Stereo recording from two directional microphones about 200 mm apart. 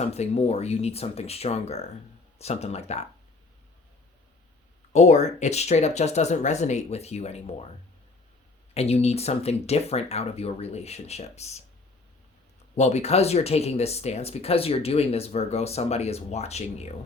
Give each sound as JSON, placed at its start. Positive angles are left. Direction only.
{"t": 0.0, "sound": "speech", "side_deg": 30}
{"t": 4.9, "sound": "speech", "side_deg": 35}
{"t": 8.7, "sound": "speech", "side_deg": 30}
{"t": 12.7, "sound": "speech", "side_deg": 35}